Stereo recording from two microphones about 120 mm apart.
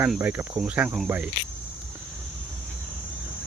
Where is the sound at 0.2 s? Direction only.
15° right (ahead or behind).